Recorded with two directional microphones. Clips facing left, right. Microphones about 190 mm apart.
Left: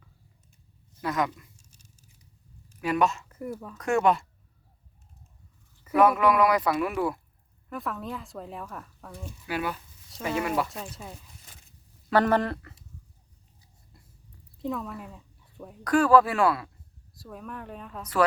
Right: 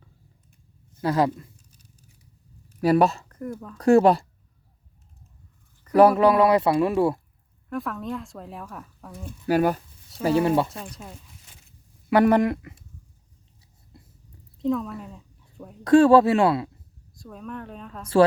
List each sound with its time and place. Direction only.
1.0 s speech: 30° right (ahead or behind)
2.8 s speech: 35° right (ahead or behind)
3.2 s speech: 5° left (ahead or behind)
3.8 s speech: 35° right (ahead or behind)
5.9 s speech: 35° right (ahead or behind)
7.7 s speech: centre (ahead or behind)
9.5 s speech: 45° right (ahead or behind)
10.2 s speech: 30° right (ahead or behind)
10.7 s speech: centre (ahead or behind)
12.1 s speech: 15° right (ahead or behind)
14.6 s speech: 5° left (ahead or behind)
15.8 s speech: 25° right (ahead or behind)
17.2 s speech: 5° left (ahead or behind)